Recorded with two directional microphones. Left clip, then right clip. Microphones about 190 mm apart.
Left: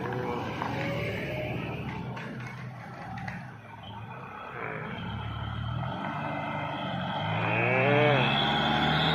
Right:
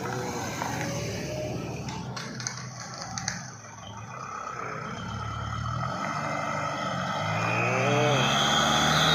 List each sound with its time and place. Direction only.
0.8 s music: 50° right (ahead or behind)
5.8 s vehicle: 10° right (ahead or behind)